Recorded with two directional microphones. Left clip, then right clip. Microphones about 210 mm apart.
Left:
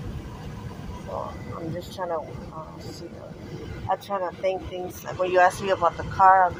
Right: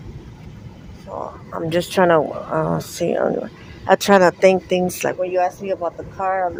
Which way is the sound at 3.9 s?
55° right (ahead or behind).